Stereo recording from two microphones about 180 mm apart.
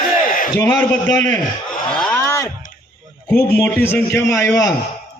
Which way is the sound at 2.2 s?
15° left (ahead or behind).